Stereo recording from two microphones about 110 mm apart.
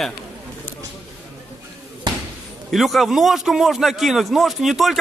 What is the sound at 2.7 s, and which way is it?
Speech, centre (ahead or behind).